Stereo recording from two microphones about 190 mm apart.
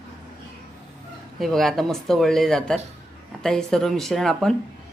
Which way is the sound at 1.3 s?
Centre (ahead or behind).